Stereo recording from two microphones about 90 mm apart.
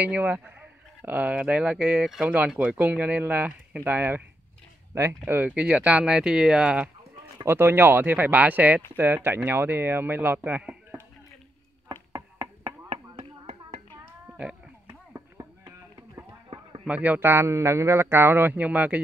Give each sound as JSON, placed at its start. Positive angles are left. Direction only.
{"t": 0.0, "sound": "a man's voice", "side_deg": -15}
{"t": 5.5, "sound": "speech", "side_deg": -15}
{"t": 7.4, "sound": "a man's voice", "side_deg": -25}
{"t": 11.9, "sound": "a sound", "side_deg": -50}
{"t": 14.2, "sound": "a sound", "side_deg": -15}
{"t": 14.9, "sound": "chop", "side_deg": -30}
{"t": 16.8, "sound": "a man's voice", "side_deg": -15}